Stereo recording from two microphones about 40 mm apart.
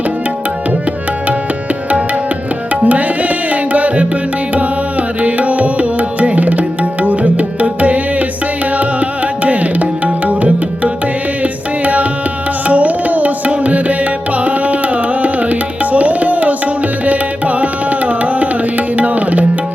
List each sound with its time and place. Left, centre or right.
2.8 s tabla: right
8.8 s music: right
12.6 s music: right
15.2 s tabla: right